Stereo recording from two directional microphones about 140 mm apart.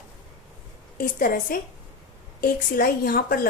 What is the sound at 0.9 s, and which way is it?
A woman's voice, 90° left.